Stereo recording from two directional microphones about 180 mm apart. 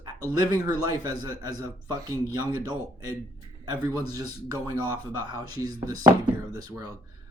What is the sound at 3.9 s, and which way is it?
Speech, 20° right (ahead or behind).